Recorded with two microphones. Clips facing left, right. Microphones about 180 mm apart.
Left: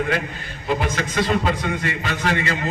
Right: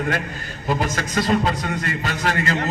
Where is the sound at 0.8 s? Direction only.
40° right (ahead or behind).